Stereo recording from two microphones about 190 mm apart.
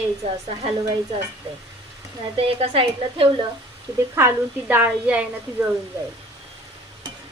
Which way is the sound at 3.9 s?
10° right (ahead or behind).